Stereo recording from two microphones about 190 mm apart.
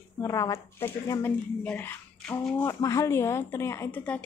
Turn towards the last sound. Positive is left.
turn(degrees=5)  # may be behind; listen again after turning